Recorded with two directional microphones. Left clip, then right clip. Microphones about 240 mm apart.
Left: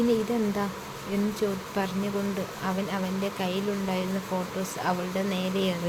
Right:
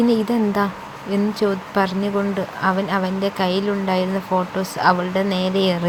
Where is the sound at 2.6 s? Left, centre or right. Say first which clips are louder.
Right 12 dB; centre.